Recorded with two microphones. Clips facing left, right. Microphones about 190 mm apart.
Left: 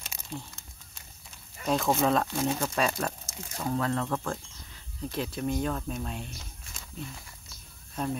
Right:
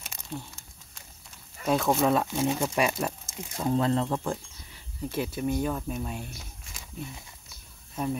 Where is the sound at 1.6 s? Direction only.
Centre (ahead or behind).